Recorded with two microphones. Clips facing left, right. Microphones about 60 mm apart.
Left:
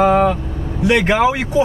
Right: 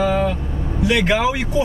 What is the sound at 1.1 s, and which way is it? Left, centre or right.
Speech, left.